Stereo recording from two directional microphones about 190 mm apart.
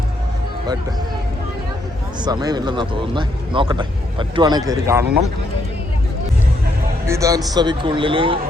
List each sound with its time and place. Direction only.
2.2 s speech: 20° right (ahead or behind)
7.0 s speech: 15° right (ahead or behind)